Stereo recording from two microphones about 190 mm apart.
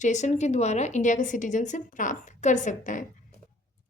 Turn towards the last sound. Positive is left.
turn(degrees=40)  # may be behind; listen again after turning